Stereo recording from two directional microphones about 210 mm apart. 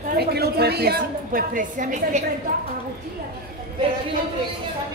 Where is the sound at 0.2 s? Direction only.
50° right (ahead or behind).